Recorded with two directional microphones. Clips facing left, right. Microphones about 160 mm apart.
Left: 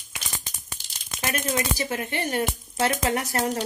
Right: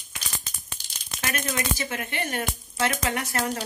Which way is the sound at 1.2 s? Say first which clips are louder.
Left 2 dB; 30° left (ahead or behind).